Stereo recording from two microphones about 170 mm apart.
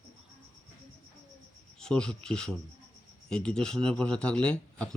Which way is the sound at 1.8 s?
5° left (ahead or behind).